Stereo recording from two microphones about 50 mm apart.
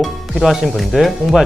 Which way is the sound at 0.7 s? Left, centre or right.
Centre.